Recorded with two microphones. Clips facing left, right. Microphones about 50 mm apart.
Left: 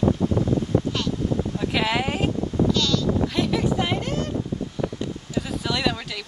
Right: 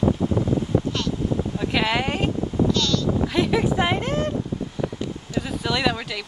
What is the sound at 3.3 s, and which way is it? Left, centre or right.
Speech, centre.